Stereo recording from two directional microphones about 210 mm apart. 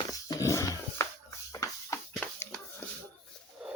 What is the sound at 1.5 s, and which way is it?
Shuffle, 15° left (ahead or behind).